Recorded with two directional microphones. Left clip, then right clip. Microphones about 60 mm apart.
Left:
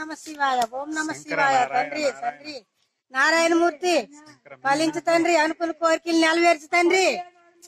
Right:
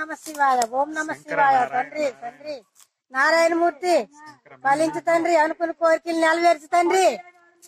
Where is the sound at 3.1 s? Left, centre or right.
Centre.